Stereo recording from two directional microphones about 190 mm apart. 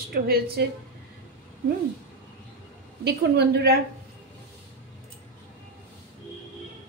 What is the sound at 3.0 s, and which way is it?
Speech, 60° right (ahead or behind).